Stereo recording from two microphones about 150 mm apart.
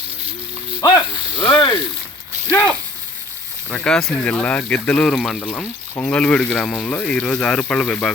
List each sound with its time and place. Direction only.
0.8 s speech: 20° left (ahead or behind)
1.4 s a sound: 30° left (ahead or behind)
3.7 s speech: 5° left (ahead or behind)